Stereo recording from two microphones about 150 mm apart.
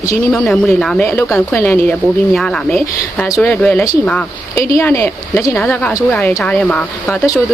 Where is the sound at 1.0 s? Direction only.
15° left (ahead or behind).